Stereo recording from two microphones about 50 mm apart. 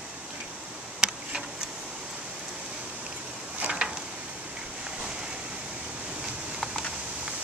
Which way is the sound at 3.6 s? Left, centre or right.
Right.